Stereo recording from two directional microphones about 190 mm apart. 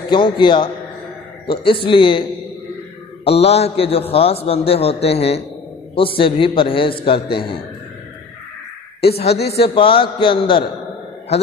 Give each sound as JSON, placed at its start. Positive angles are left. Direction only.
{"t": 0.1, "sound": "a man's voice", "side_deg": 25}
{"t": 3.3, "sound": "a man's voice", "side_deg": 30}
{"t": 9.1, "sound": "a man's voice", "side_deg": 35}